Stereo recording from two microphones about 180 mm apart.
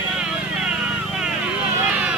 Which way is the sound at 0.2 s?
5° right (ahead or behind).